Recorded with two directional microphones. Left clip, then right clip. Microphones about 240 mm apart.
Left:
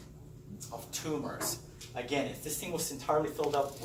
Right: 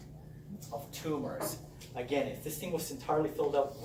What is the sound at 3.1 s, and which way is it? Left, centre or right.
Speech, left.